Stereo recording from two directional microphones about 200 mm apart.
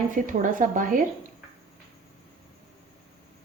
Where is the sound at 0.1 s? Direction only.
40° right (ahead or behind).